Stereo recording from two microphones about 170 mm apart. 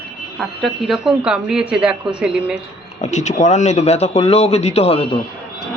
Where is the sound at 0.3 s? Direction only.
Centre (ahead or behind).